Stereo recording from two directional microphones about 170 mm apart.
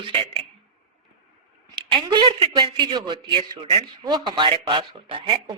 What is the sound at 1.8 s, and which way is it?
Speech, 25° right (ahead or behind).